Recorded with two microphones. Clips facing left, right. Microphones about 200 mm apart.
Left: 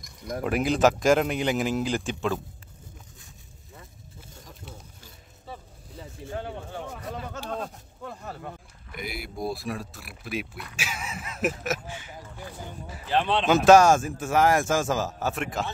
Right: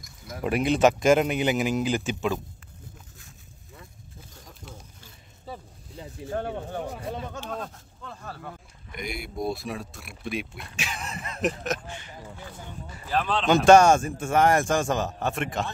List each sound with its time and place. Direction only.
0.0 s speech: centre (ahead or behind)
6.2 s speech: 50° right (ahead or behind)
6.7 s speech: 35° right (ahead or behind)
7.2 s speech: 5° left (ahead or behind)
8.9 s speech: 5° left (ahead or behind)
13.1 s speech: 25° left (ahead or behind)
13.5 s speech: centre (ahead or behind)